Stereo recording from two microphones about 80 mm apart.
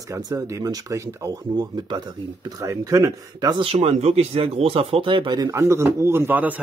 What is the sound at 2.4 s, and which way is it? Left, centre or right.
Speech, right.